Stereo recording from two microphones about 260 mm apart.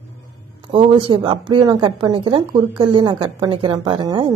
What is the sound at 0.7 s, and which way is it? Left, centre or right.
A woman's voice, centre.